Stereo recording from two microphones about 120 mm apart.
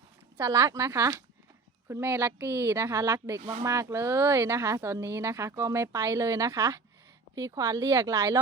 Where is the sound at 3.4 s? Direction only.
55° right (ahead or behind).